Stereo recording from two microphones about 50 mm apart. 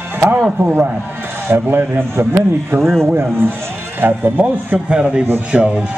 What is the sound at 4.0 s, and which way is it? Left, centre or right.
Speech, right.